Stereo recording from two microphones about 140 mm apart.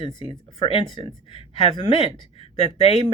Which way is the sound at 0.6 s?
40° left (ahead or behind).